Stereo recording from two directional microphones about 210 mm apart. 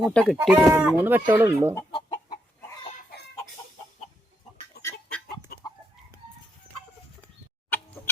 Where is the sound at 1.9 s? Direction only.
25° left (ahead or behind).